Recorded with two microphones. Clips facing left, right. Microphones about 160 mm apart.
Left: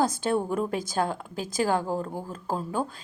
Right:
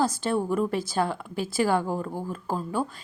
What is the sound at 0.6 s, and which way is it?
A woman's voice, 45° left (ahead or behind).